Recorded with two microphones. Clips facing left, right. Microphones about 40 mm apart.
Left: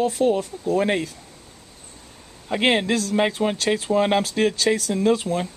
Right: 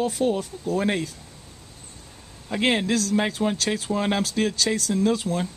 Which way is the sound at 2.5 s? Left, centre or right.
Centre.